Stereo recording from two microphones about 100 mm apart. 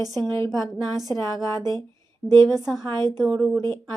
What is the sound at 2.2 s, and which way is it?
Speech, 35° right (ahead or behind).